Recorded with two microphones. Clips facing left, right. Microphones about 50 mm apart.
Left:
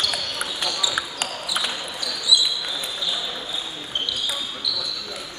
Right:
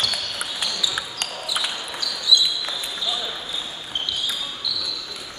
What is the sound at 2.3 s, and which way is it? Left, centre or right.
Basketball bounce, centre.